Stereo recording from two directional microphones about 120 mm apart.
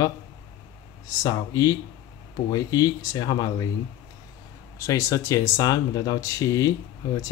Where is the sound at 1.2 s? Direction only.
30° left (ahead or behind).